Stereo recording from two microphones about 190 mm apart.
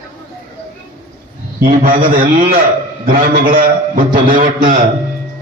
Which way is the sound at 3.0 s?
50° right (ahead or behind).